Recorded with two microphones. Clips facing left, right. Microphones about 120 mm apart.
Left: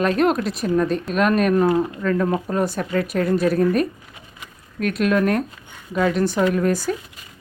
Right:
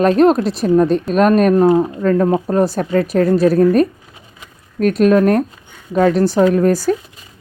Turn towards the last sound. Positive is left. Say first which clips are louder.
# right 6 dB
turn(degrees=-35)  # may be behind; listen again after turning